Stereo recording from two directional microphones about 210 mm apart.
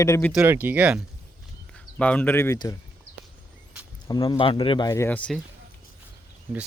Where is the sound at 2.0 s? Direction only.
5° left (ahead or behind).